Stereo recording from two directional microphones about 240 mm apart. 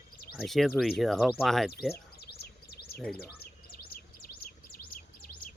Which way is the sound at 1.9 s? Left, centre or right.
Left.